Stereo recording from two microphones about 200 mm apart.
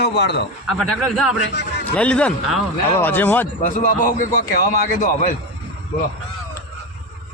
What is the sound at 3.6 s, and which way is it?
A man's voice, 45° left (ahead or behind).